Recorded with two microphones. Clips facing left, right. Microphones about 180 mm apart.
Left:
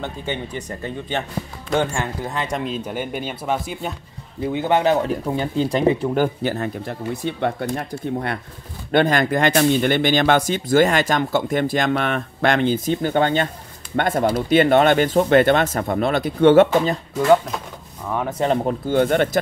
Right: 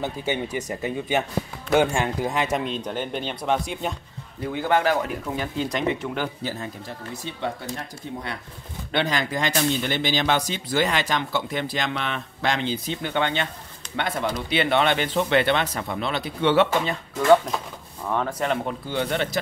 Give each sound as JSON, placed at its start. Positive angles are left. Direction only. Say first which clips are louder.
{"t": 0.0, "sound": "speech", "louder": "right 1 dB", "side_deg": -10}
{"t": 2.5, "sound": "speech", "louder": "left 1 dB", "side_deg": 0}
{"t": 4.4, "sound": "speech", "louder": "left 3 dB", "side_deg": 20}
{"t": 6.2, "sound": "speech", "louder": "left 8 dB", "side_deg": 65}
{"t": 18.4, "sound": "speech", "louder": "left 6 dB", "side_deg": 35}